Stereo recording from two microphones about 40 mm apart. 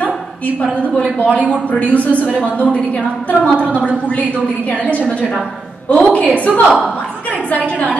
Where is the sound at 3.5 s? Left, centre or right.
Right.